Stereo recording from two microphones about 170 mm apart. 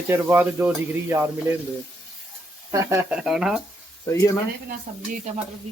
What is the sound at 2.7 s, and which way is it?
Speech, 20° right (ahead or behind).